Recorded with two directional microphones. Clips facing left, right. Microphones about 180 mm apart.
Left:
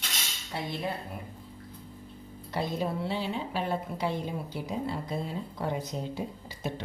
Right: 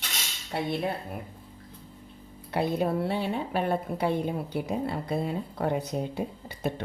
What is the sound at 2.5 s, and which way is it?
A woman's voice, 60° right (ahead or behind).